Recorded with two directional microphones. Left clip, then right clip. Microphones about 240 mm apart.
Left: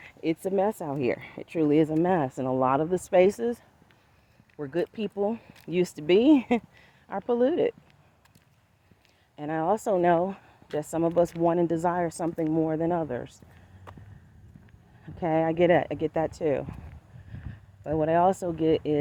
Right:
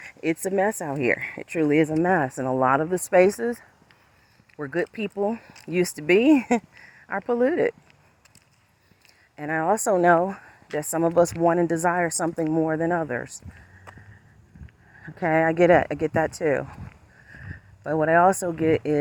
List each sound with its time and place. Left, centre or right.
0.3 s speech: right
5.5 s speech: centre
5.7 s speech: right
9.3 s speech: right
10.0 s speech: centre
10.8 s speech: right
15.0 s speech: right
15.5 s speech: centre
16.1 s speech: right
17.9 s speech: centre